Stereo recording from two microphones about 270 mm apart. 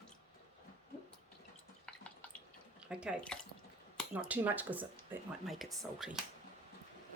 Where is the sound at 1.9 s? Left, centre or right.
Centre.